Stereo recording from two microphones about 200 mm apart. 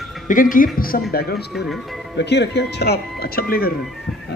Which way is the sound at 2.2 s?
60° left (ahead or behind).